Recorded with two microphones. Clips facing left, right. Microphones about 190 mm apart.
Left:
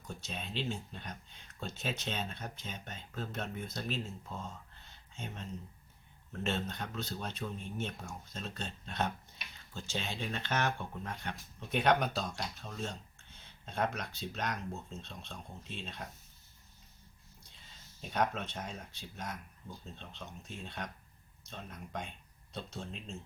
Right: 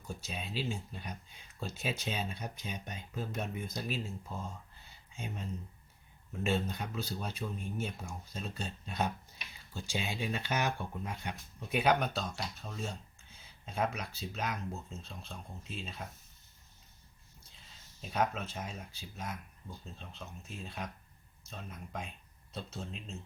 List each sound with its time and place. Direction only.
0.1 s speech: 10° right (ahead or behind)
17.5 s speech: centre (ahead or behind)